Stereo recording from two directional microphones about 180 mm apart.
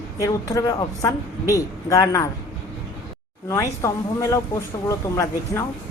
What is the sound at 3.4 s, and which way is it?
A woman's voice, 15° left (ahead or behind).